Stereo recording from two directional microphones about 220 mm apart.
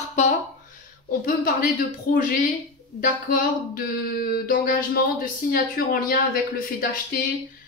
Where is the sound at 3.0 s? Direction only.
40° left (ahead or behind).